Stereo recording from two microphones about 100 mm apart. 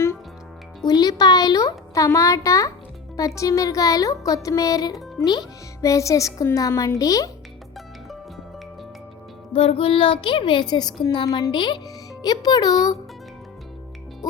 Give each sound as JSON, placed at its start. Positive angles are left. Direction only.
{"t": 0.9, "sound": "speech", "side_deg": 40}
{"t": 9.5, "sound": "a woman's voice", "side_deg": 70}